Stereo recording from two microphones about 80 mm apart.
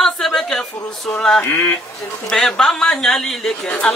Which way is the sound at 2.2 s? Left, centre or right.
Centre.